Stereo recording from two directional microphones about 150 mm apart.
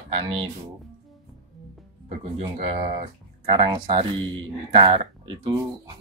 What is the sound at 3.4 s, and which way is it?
Speech, 30° right (ahead or behind).